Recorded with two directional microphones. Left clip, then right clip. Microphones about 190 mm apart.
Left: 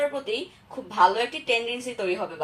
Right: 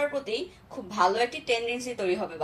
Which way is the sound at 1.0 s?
25° left (ahead or behind).